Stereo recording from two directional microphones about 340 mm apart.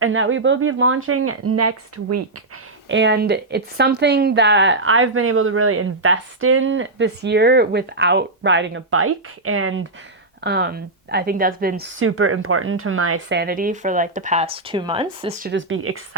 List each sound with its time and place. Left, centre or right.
0.0 s a woman's voice: right
2.9 s a woman's voice: right